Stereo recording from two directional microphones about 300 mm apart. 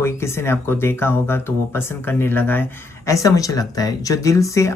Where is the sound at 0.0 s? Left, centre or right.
Centre.